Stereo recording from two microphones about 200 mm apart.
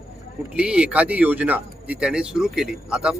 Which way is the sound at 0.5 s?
5° right (ahead or behind).